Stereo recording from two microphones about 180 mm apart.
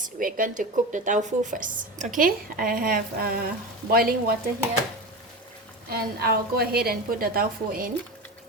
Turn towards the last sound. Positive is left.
turn(degrees=-55)  # may be behind; listen again after turning